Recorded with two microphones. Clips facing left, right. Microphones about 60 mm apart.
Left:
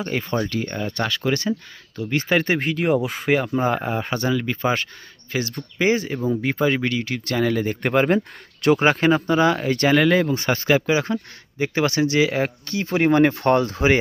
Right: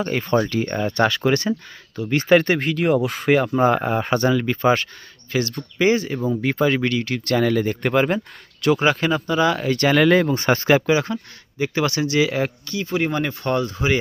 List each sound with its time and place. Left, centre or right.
0.0 s speech: centre
2.4 s speech: centre
3.1 s speech: centre
5.3 s speech: centre
6.1 s speech: centre
6.4 s speech: centre
8.6 s speech: left
9.9 s speech: centre
11.1 s speech: centre
12.6 s speech: left